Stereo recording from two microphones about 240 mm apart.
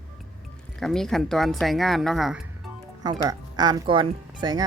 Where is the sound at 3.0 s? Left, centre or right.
Centre.